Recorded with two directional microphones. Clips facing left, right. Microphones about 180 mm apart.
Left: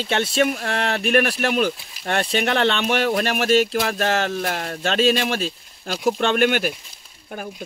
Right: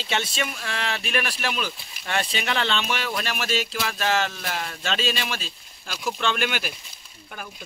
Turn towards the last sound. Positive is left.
turn(degrees=50)  # may be behind; listen again after turning